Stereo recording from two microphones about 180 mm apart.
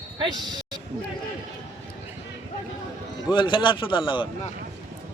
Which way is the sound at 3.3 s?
25° left (ahead or behind).